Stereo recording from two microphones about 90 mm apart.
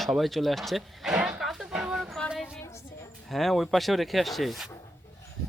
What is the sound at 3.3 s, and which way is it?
Speech, centre (ahead or behind).